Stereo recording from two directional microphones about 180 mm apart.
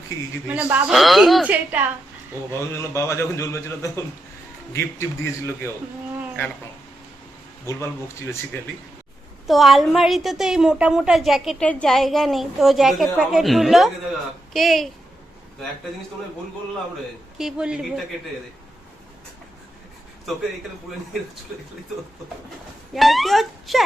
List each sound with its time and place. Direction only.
0.4 s a woman's voice: 5° right (ahead or behind)
2.5 s a man's voice: 15° left (ahead or behind)
7.6 s a man's voice: 15° left (ahead or behind)
9.5 s a woman's voice: centre (ahead or behind)
17.3 s a woman's voice: 5° right (ahead or behind)
23.0 s a woman's voice: centre (ahead or behind)